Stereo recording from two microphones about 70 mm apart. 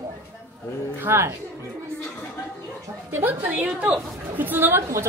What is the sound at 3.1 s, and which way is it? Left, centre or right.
A woman's voice, right.